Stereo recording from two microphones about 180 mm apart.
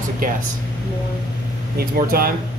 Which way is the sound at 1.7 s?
55° right (ahead or behind).